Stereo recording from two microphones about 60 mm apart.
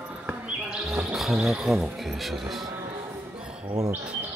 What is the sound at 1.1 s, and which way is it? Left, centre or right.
Speech, centre.